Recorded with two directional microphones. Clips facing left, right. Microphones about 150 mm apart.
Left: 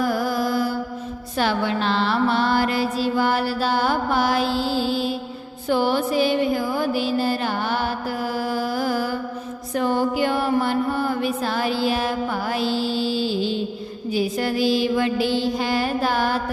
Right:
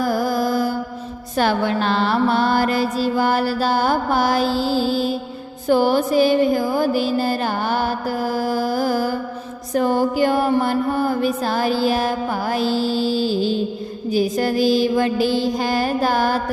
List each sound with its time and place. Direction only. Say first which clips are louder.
0.0 s music: right 2 dB; 40° right (ahead or behind)
1.4 s mantra: right 3 dB; 45° right (ahead or behind)
5.6 s music: right 4 dB; 45° right (ahead or behind)
9.7 s mantra: right 3 dB; 40° right (ahead or behind)